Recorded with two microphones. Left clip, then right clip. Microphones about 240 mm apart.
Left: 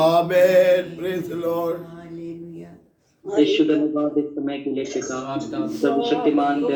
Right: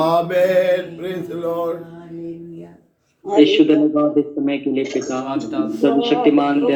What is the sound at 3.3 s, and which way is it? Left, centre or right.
A man's voice, right.